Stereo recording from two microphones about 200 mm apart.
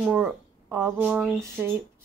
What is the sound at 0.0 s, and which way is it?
Speech, centre (ahead or behind).